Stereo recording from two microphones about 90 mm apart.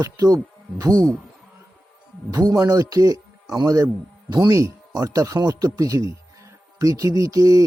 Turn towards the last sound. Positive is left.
turn(degrees=-40)  # may be behind; listen again after turning